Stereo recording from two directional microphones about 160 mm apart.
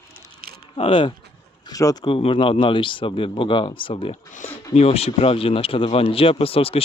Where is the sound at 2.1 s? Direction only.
35° left (ahead or behind).